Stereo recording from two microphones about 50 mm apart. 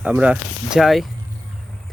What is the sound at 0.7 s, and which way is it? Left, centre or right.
Speech, centre.